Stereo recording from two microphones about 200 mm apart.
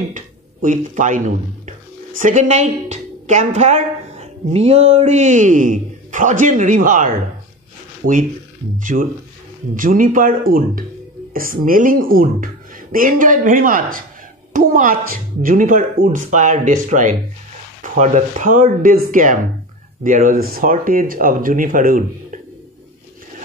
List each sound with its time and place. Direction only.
0.1 s a woman's voice: 40° right (ahead or behind)